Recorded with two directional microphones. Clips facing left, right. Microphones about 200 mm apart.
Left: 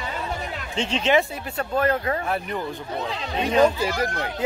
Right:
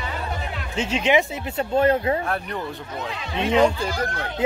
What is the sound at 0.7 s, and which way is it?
Speech, 5° right (ahead or behind).